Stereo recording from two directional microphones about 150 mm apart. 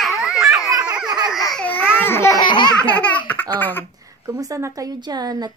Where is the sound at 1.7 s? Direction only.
15° left (ahead or behind).